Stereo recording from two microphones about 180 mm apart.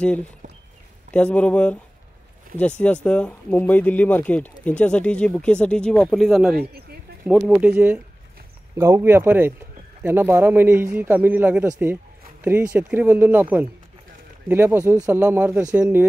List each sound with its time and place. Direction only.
0.0 s speech: 5° left (ahead or behind)
2.8 s speech: 5° left (ahead or behind)
6.5 s a sound: 60° right (ahead or behind)
7.2 s a man's voice: 5° right (ahead or behind)